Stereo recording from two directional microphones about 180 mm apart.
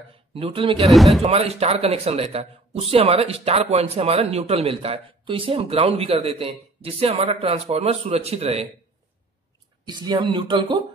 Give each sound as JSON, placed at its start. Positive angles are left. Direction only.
{"t": 0.3, "sound": "speech", "side_deg": -30}
{"t": 0.8, "sound": "a man's voice", "side_deg": 0}
{"t": 1.2, "sound": "a man's voice", "side_deg": -35}
{"t": 9.8, "sound": "speech", "side_deg": -25}